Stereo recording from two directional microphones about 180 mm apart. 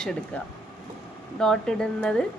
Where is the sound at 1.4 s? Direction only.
5° left (ahead or behind).